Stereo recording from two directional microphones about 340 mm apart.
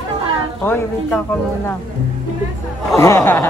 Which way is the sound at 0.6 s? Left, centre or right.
Centre.